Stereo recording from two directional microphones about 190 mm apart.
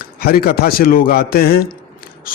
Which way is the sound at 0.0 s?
55° left (ahead or behind).